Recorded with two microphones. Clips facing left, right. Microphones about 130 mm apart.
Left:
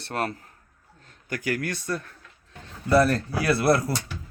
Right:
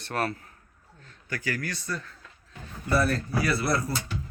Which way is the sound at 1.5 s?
55° left (ahead or behind).